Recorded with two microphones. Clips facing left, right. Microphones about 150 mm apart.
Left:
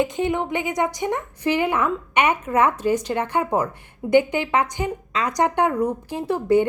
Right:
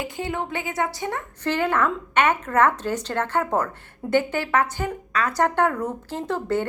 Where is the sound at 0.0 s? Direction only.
20° left (ahead or behind).